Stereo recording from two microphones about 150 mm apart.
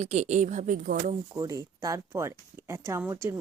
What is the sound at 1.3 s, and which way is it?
Speech, 25° right (ahead or behind).